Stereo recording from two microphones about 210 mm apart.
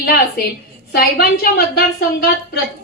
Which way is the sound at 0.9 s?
50° left (ahead or behind).